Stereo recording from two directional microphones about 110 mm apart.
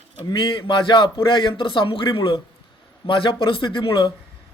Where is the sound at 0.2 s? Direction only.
50° left (ahead or behind).